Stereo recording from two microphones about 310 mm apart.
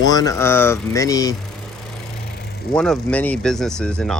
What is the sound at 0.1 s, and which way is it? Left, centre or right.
Speech, centre.